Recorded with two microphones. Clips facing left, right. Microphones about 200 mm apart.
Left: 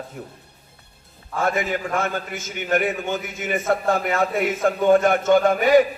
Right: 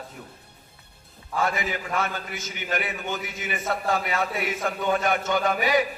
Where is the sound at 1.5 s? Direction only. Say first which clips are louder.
Left 6 dB; 50° left (ahead or behind).